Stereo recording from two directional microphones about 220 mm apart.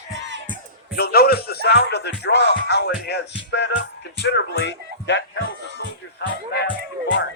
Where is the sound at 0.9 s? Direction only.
45° left (ahead or behind).